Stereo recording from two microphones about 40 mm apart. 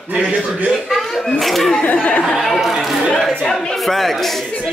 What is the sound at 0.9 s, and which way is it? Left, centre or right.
Speech, centre.